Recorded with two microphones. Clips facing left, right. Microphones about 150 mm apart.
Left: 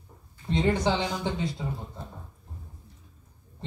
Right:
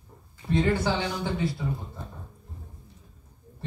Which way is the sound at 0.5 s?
20° left (ahead or behind).